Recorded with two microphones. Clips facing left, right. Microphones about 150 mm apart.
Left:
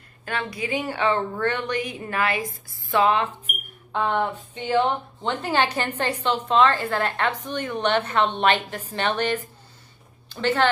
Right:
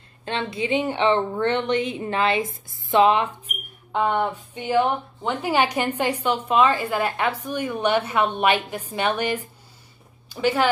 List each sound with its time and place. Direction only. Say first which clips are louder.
0.2 s a woman's voice: right 3 dB; 25° right (ahead or behind)